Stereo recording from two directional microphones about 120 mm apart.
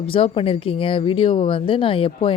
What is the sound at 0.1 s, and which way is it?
Speech, 50° left (ahead or behind).